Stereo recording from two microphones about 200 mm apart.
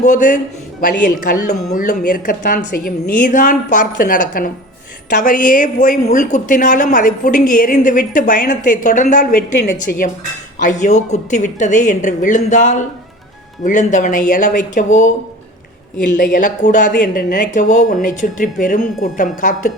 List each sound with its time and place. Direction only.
0.0 s a woman's voice: 40° left (ahead or behind)
10.6 s a woman's voice: 40° left (ahead or behind)